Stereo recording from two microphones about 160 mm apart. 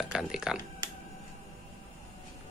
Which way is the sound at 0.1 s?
5° right (ahead or behind).